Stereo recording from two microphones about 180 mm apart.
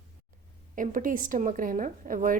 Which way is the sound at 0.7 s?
50° right (ahead or behind).